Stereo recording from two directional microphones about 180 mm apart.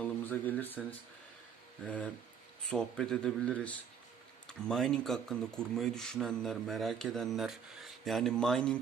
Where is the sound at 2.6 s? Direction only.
5° left (ahead or behind).